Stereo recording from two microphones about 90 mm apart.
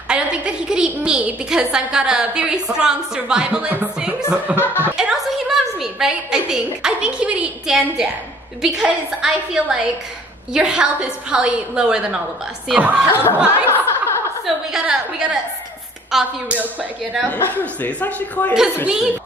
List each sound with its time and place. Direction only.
0.1 s a woman's voice: 10° right (ahead or behind)
4.6 s speech: 20° left (ahead or behind)
4.9 s a woman's voice: 5° right (ahead or behind)
13.1 s speech: 25° left (ahead or behind)
13.5 s a sound: 25° left (ahead or behind)
14.4 s a woman's voice: 5° right (ahead or behind)
17.3 s a man's voice: 20° left (ahead or behind)